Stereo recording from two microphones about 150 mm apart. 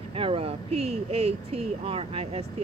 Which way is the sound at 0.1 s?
40° right (ahead or behind).